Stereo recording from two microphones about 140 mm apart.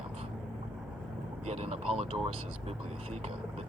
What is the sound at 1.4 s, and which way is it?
Speech, 50° right (ahead or behind).